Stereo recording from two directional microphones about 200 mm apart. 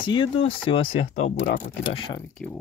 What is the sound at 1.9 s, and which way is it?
Speech, 25° left (ahead or behind).